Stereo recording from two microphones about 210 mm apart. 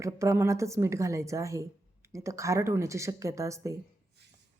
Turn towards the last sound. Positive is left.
turn(degrees=-15)  # may be behind; listen again after turning